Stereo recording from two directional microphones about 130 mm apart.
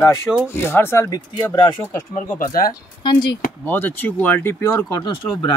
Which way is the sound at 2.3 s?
90° left.